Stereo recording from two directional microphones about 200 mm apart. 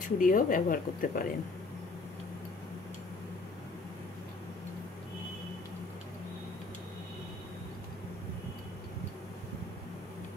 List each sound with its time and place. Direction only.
0.2 s speech: 45° left (ahead or behind)